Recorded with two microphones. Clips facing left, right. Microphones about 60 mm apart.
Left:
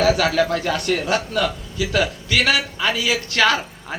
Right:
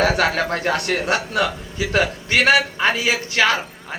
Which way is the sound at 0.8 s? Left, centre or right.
Right.